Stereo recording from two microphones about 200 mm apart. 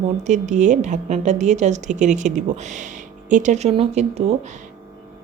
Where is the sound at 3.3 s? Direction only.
35° right (ahead or behind).